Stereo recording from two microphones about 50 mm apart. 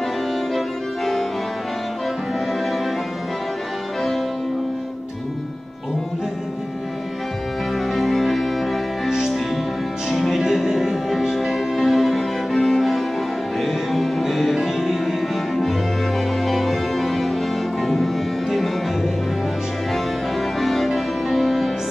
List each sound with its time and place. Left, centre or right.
0.6 s music: centre
7.9 s music: centre
20.5 s music: centre